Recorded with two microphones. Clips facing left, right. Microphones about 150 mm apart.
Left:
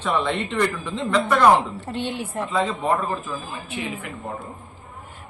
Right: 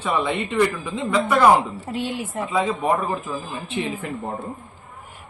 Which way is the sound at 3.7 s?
30° right (ahead or behind).